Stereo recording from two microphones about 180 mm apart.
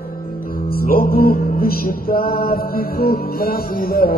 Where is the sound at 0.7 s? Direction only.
55° left (ahead or behind).